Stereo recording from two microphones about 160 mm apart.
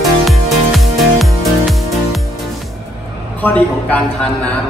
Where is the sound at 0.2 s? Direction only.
Centre (ahead or behind).